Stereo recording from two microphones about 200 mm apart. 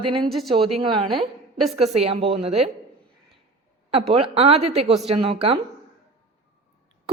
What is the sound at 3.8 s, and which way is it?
A woman's voice, 30° right (ahead or behind).